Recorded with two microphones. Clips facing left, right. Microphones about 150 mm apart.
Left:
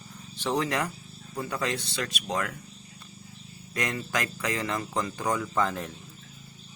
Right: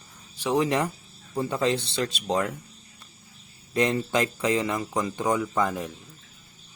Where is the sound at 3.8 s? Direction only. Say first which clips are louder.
Right 7 dB; 25° right (ahead or behind); by 5.9 s 10° right (ahead or behind).